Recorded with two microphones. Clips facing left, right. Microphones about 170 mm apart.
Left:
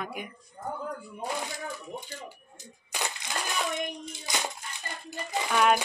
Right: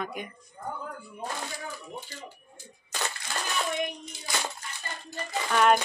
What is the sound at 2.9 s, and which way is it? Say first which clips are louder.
Coin: even; 15° left (ahead or behind).